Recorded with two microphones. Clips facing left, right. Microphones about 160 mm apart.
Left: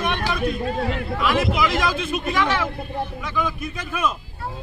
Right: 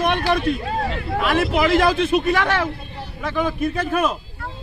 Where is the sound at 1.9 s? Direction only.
60° right (ahead or behind).